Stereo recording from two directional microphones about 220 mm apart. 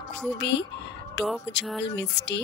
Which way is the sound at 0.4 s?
55° left (ahead or behind).